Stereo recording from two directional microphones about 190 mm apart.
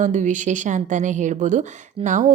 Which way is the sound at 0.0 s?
40° right (ahead or behind).